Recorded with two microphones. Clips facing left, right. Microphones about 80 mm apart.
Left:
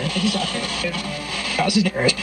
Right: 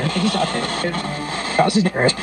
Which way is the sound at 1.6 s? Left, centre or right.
Right.